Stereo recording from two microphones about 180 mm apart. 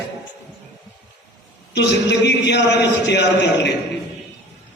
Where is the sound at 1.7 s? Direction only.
70° left (ahead or behind).